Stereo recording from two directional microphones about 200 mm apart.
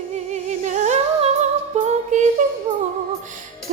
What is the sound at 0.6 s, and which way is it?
Music, 35° right (ahead or behind).